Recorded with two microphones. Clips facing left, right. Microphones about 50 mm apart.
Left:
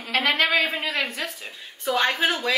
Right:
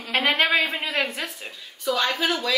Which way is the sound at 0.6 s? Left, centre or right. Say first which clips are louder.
Even; centre.